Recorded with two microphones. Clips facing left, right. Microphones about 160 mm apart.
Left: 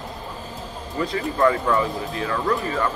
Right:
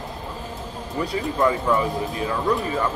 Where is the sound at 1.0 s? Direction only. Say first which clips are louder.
Left 1 dB; 15° right (ahead or behind).